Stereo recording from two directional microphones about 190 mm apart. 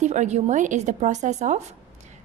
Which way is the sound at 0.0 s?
40° right (ahead or behind).